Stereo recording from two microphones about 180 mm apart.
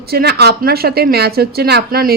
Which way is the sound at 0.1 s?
60° right (ahead or behind).